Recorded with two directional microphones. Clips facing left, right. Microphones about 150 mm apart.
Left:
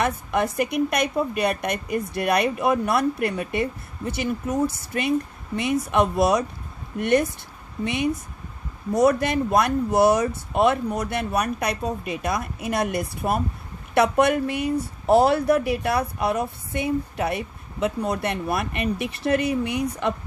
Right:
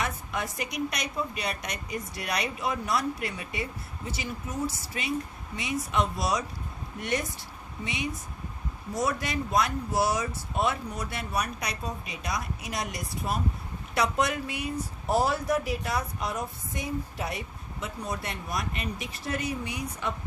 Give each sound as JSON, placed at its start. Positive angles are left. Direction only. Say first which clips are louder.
{"t": 0.0, "sound": "speech", "louder": "left 9 dB", "side_deg": 55}